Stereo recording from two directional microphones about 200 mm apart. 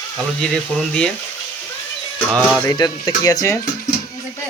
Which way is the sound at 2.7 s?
20° left (ahead or behind).